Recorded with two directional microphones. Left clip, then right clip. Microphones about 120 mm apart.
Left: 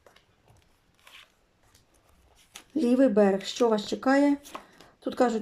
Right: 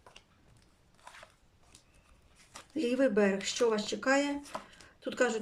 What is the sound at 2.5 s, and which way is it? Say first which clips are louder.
Speech: left 7 dB; 20° left (ahead or behind).